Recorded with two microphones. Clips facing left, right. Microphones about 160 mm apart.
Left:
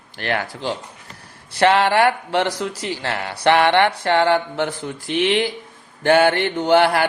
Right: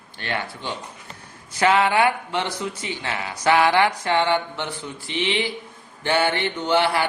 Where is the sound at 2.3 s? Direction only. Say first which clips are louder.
Left 5 dB; 75° left (ahead or behind).